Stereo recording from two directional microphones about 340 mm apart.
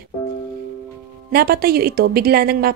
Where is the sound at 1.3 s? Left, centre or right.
Right.